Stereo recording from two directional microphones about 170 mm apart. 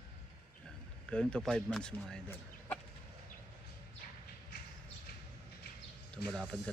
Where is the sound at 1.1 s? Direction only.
5° left (ahead or behind).